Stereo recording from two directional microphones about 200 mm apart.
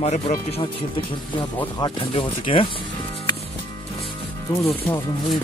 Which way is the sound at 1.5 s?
20° left (ahead or behind).